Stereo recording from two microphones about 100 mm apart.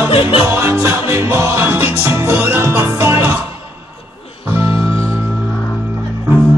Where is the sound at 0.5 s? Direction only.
25° right (ahead or behind).